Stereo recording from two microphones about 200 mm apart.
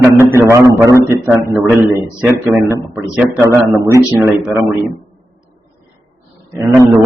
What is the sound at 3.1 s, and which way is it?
A man's voice, 15° right (ahead or behind).